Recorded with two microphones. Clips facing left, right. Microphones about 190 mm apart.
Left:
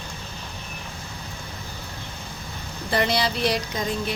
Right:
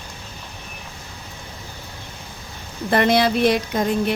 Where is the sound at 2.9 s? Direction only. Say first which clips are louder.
Right 6 dB; 55° right (ahead or behind).